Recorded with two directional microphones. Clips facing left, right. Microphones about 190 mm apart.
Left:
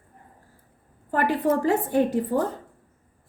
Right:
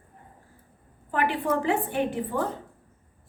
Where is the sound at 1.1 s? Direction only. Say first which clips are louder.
Left 3 dB; 40° left (ahead or behind).